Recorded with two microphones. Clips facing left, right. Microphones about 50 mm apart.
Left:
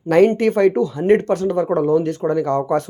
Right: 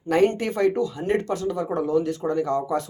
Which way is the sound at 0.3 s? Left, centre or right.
Left.